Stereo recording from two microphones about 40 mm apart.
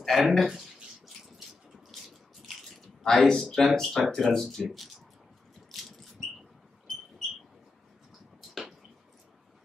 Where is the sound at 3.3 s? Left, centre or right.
Centre.